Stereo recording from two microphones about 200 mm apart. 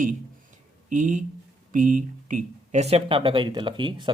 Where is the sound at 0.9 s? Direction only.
40° right (ahead or behind).